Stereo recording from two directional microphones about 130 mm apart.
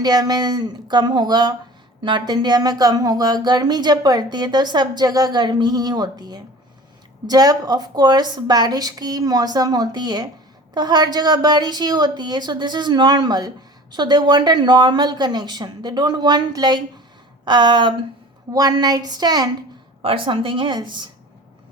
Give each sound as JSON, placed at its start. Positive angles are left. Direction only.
{"t": 0.0, "sound": "speech", "side_deg": -30}
{"t": 20.0, "sound": "speech", "side_deg": -45}